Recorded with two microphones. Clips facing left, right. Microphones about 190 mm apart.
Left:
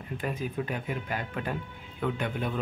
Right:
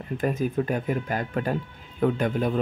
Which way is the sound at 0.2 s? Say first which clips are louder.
Right 8 dB; 45° right (ahead or behind).